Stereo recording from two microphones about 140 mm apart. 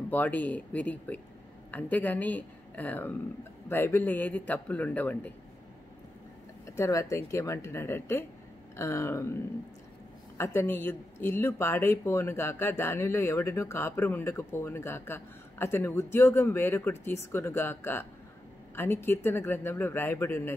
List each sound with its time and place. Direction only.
0.1 s speech: 10° left (ahead or behind)
6.6 s speech: 20° left (ahead or behind)
10.3 s speech: 20° left (ahead or behind)